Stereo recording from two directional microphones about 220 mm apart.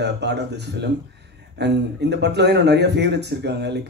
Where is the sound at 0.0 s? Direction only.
50° right (ahead or behind).